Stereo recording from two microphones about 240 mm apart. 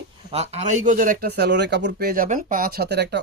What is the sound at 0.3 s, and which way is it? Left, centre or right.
Speech, right.